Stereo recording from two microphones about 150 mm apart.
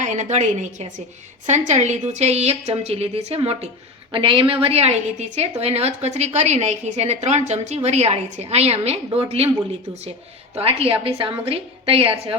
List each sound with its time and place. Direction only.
0.0 s a woman's voice: 50° right (ahead or behind)
10.5 s a woman's voice: 40° right (ahead or behind)